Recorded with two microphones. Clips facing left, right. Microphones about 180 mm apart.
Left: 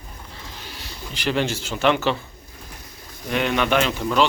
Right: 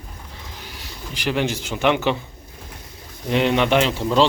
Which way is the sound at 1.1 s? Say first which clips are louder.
Right 1 dB; 15° right (ahead or behind).